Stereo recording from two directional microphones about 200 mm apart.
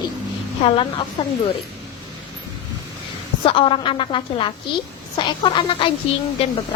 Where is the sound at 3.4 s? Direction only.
25° left (ahead or behind).